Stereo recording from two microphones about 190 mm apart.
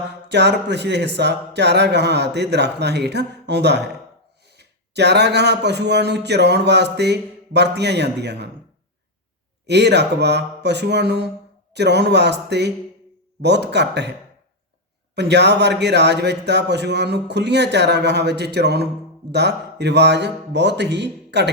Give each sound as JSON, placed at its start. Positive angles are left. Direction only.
{"t": 0.3, "sound": "speech", "side_deg": -65}
{"t": 9.6, "sound": "speech", "side_deg": -65}
{"t": 15.1, "sound": "speech", "side_deg": -65}